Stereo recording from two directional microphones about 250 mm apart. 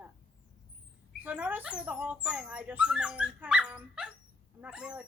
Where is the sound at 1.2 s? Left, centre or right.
Centre.